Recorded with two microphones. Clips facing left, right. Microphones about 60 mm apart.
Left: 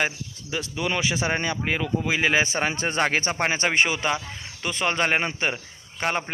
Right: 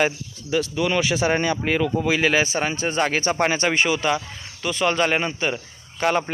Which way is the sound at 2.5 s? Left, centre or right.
Left.